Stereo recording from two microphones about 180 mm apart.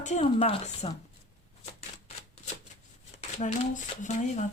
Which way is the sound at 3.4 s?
40° left (ahead or behind).